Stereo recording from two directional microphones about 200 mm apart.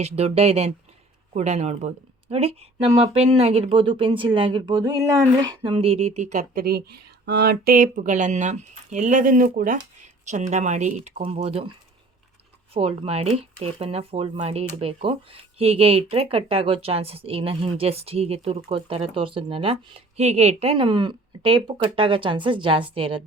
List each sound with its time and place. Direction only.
0.0 s speech: 30° right (ahead or behind)
12.7 s speech: 30° right (ahead or behind)